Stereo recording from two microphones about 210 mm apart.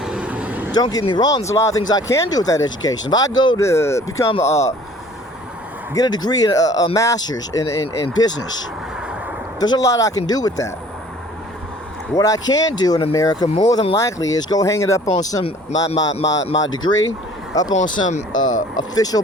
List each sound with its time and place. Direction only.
0.0 s vehicle: 5° right (ahead or behind)
0.7 s speech: 20° left (ahead or behind)
4.3 s speech: 30° left (ahead or behind)
5.9 s speech: 20° left (ahead or behind)
9.6 s speech: 20° left (ahead or behind)
12.1 s speech: 15° left (ahead or behind)
16.2 s speech: 60° left (ahead or behind)
16.7 s a man's voice: 20° left (ahead or behind)
18.3 s speech: 70° left (ahead or behind)
18.8 s speech: 20° left (ahead or behind)